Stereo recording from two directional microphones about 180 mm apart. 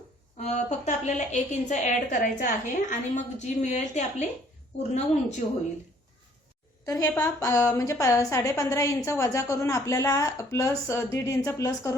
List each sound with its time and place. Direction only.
0.3 s a woman's voice: 40° left (ahead or behind)
5.4 s a woman's voice: 35° left (ahead or behind)
6.8 s a woman's voice: 20° left (ahead or behind)